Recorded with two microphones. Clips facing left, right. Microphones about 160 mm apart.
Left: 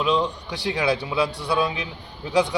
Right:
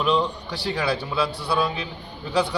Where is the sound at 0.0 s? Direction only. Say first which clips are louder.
Even; 10° left (ahead or behind).